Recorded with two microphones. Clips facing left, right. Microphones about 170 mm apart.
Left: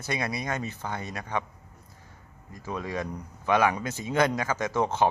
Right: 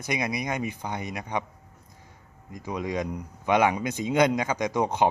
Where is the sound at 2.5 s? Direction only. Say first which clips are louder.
Right 3 dB; 15° right (ahead or behind).